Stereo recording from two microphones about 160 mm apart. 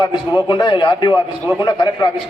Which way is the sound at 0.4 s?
30° left (ahead or behind).